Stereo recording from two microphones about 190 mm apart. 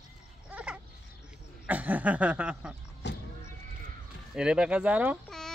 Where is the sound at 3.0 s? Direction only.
65° left (ahead or behind).